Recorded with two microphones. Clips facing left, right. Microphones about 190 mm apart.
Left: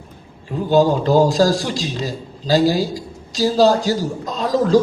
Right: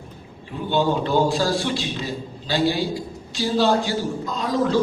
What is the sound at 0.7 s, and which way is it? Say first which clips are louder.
A man's voice: left 6 dB; 40° left (ahead or behind).